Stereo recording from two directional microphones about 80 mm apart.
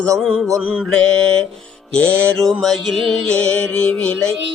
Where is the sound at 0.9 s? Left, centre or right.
Centre.